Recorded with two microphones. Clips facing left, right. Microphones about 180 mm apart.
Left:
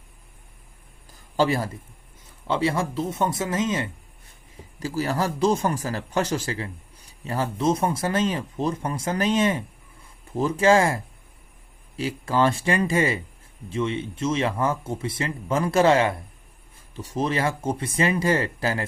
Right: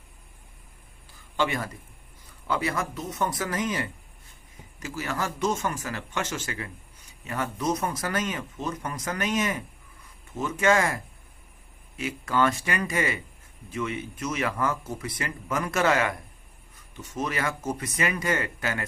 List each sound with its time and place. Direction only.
1.4 s a man's voice: 35° left (ahead or behind)